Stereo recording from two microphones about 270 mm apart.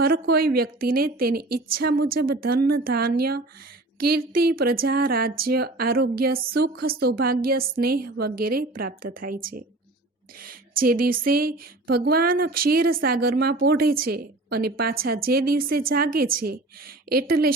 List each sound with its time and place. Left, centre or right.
0.0 s speech: right